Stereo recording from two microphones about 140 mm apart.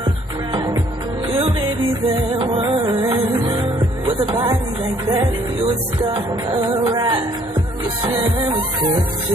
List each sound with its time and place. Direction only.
0.0 s music: 35° right (ahead or behind)
2.3 s music: 35° right (ahead or behind)
6.9 s music: 35° right (ahead or behind)